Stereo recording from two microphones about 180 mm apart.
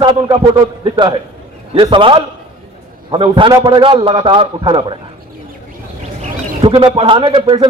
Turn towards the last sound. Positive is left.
turn(degrees=-25)  # may be behind; listen again after turning